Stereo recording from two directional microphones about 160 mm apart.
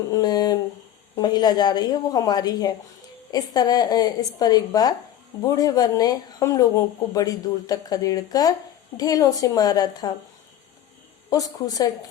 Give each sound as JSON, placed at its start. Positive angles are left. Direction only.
{"t": 0.1, "sound": "speech", "side_deg": 25}
{"t": 11.3, "sound": "speech", "side_deg": 20}